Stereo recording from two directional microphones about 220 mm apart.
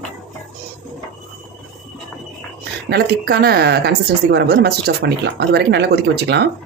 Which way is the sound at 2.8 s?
45° right (ahead or behind).